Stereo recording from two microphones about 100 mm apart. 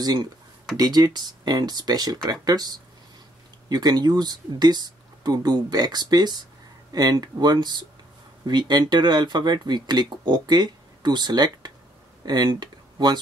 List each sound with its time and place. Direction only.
0.0 s speech: 40° right (ahead or behind)